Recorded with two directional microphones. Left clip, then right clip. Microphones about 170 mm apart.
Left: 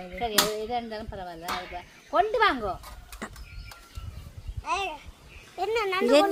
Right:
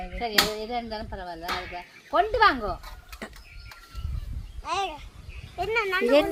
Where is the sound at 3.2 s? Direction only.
15° right (ahead or behind).